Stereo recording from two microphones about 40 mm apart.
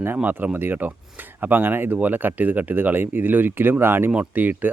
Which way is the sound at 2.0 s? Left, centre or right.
Right.